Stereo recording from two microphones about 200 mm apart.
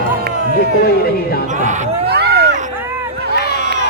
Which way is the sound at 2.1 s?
55° right (ahead or behind).